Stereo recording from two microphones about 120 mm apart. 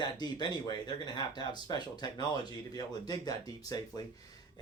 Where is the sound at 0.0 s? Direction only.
35° left (ahead or behind).